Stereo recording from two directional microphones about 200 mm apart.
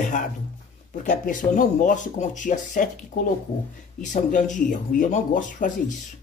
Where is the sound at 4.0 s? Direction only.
40° left (ahead or behind).